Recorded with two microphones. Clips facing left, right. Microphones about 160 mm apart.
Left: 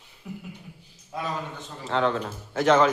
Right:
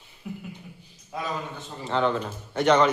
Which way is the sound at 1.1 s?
Centre (ahead or behind).